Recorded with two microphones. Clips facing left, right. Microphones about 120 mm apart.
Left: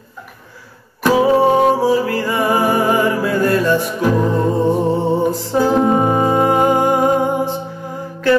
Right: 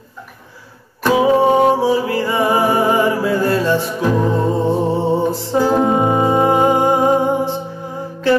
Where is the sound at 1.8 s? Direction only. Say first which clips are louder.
Even; 25° right (ahead or behind).